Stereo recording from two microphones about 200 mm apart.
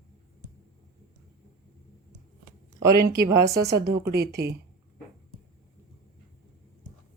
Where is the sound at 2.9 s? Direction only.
50° right (ahead or behind).